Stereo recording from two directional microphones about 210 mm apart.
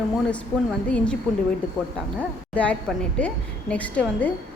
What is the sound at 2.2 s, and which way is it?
A woman's voice, 5° left (ahead or behind).